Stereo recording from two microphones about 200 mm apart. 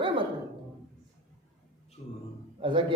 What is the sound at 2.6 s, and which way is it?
Speech, 25° right (ahead or behind).